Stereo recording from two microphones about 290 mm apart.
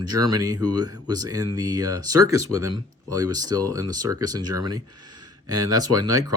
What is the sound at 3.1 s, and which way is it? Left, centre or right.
Speech, centre.